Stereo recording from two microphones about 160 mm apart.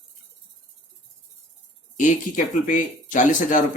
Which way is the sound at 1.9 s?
55° left (ahead or behind).